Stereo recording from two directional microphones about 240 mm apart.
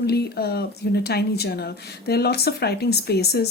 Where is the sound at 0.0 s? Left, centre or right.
Left.